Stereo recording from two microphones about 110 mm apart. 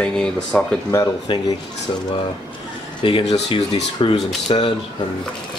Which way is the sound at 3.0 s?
50° left (ahead or behind).